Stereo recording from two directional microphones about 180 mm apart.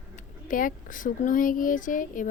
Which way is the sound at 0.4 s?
50° left (ahead or behind).